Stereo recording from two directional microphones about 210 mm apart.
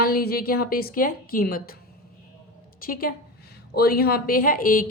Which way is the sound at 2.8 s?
45° left (ahead or behind).